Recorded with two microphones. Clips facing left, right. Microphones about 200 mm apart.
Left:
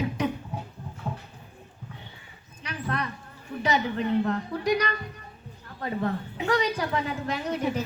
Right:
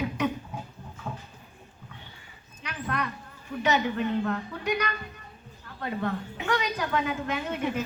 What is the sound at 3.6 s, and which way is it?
A woman's voice, 35° left (ahead or behind).